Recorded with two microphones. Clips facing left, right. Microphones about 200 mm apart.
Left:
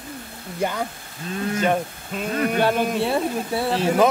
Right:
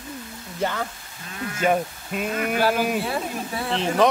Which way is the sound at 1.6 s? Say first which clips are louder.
Right 3 dB; 5° right (ahead or behind).